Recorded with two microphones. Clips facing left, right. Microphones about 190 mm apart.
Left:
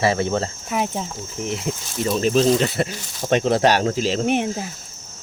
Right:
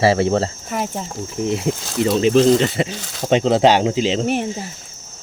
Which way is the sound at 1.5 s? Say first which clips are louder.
Right 5 dB; 25° right (ahead or behind).